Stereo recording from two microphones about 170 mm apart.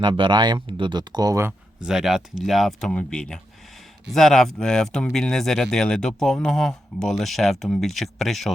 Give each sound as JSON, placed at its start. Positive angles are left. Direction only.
{"t": 0.0, "sound": "speech", "side_deg": -30}
{"t": 1.8, "sound": "speech", "side_deg": -5}